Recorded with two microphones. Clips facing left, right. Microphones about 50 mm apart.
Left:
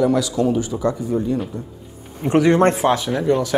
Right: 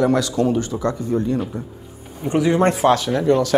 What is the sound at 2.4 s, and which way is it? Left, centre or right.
Speech, left.